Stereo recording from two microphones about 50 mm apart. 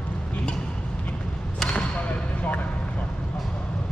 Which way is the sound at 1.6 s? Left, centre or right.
Left.